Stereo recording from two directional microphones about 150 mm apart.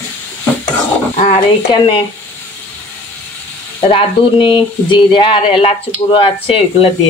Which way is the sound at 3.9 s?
30° left (ahead or behind).